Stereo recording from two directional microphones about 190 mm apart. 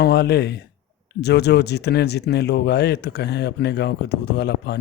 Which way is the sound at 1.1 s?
60° left (ahead or behind).